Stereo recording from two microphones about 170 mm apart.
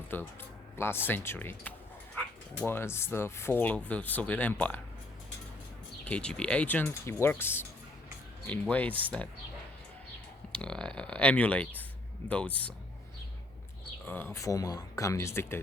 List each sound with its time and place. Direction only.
0.1 s speech: 10° left (ahead or behind)
6.1 s speech: 5° left (ahead or behind)
10.6 s speech: 5° left (ahead or behind)
14.0 s speech: 10° left (ahead or behind)